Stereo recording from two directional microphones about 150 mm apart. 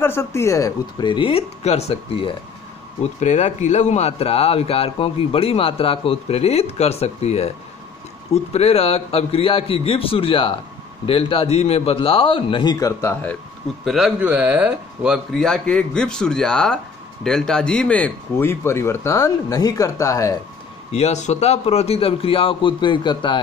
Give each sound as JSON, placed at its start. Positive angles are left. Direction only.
{"t": 0.0, "sound": "a man's voice", "side_deg": 15}
{"t": 12.7, "sound": "speech", "side_deg": 20}
{"t": 13.1, "sound": "speech", "side_deg": 10}
{"t": 13.8, "sound": "speech", "side_deg": 0}
{"t": 15.3, "sound": "speech", "side_deg": 5}
{"t": 20.9, "sound": "a man's voice", "side_deg": 50}